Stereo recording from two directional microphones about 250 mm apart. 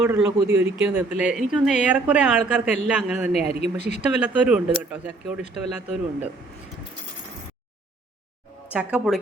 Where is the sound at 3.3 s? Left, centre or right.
Left.